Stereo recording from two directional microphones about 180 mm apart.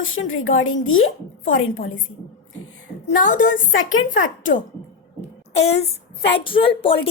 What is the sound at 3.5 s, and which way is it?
Speech, 90° left.